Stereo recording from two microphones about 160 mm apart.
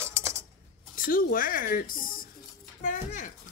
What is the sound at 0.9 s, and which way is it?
Speech, 60° left (ahead or behind).